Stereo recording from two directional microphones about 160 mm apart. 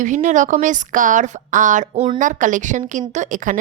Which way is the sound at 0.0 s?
50° right (ahead or behind).